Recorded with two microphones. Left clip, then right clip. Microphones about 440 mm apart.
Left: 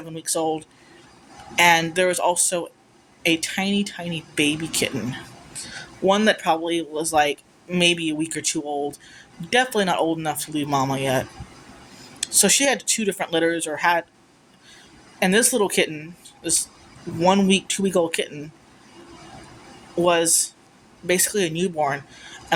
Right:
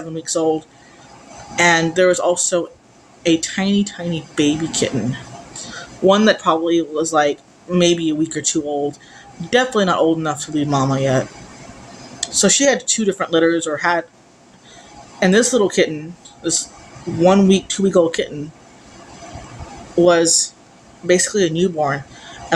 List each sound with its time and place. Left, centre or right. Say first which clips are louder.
0.1 s a man's voice: right 6 dB; left
15.2 s a man's voice: right 5 dB; left
20.1 s speech: right 5 dB; left
21.1 s a man's voice: right 6 dB; left